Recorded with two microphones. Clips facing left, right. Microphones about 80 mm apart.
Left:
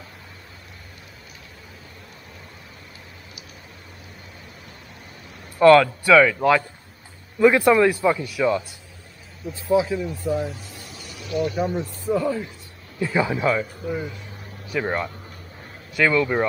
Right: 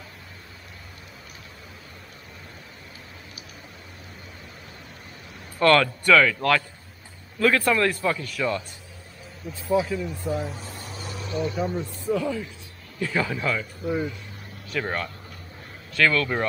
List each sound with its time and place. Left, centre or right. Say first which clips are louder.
5.6 s a man's voice: left 6 dB; centre
10.5 s vehicle: right 2 dB; right
11.4 s speech: left 2 dB; centre
12.1 s a man's voice: left 3 dB; centre
13.8 s speech: right 1 dB; centre
14.7 s a man's voice: left 4 dB; centre